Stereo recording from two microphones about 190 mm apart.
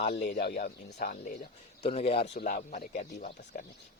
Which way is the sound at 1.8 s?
35° left (ahead or behind).